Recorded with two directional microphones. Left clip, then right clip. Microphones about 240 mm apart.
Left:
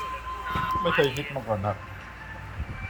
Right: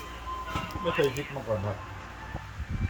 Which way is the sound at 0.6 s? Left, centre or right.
Centre.